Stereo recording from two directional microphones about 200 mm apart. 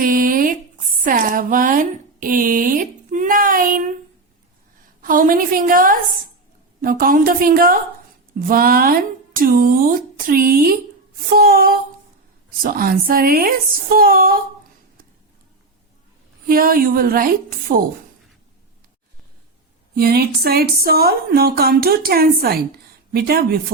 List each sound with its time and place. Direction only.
0.0 s a sound: 45° right (ahead or behind)
1.0 s speech: 45° right (ahead or behind)
5.0 s speech: 45° right (ahead or behind)
16.5 s speech: 45° right (ahead or behind)
20.0 s speech: 50° right (ahead or behind)